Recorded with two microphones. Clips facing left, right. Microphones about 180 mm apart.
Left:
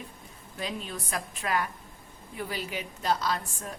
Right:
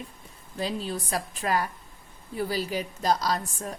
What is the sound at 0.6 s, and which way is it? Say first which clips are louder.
A woman's voice: right 5 dB; 35° right (ahead or behind).